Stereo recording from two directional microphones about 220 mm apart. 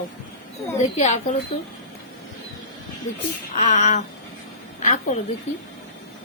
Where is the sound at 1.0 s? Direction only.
35° left (ahead or behind).